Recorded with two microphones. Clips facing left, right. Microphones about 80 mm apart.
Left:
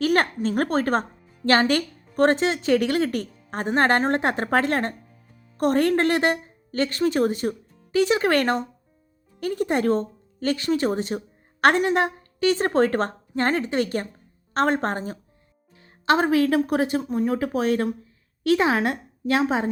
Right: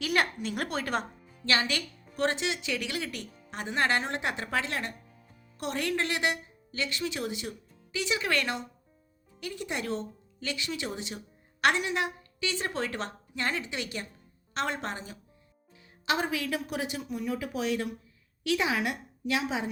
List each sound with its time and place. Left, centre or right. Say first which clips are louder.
0.0 s a woman's voice: left 8 dB; left